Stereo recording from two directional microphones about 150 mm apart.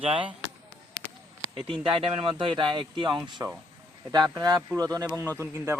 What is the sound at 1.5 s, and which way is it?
A man's voice, 35° right (ahead or behind).